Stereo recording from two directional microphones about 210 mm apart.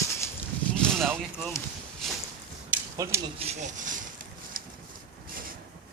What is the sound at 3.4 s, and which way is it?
Speech, 35° right (ahead or behind).